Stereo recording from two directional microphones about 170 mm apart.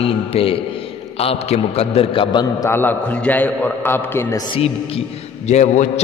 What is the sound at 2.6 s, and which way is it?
A man's voice, 10° left (ahead or behind).